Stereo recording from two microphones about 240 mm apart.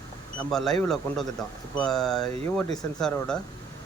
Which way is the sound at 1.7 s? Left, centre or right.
Centre.